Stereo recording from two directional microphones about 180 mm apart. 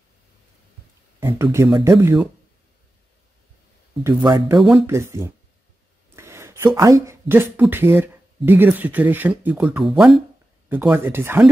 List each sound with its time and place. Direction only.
1.2 s speech: 15° right (ahead or behind)
4.2 s speech: 20° right (ahead or behind)
6.1 s a sound: 15° right (ahead or behind)
7.7 s speech: 10° right (ahead or behind)